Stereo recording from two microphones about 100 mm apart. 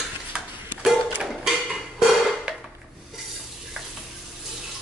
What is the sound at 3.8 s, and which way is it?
Stir, 5° right (ahead or behind).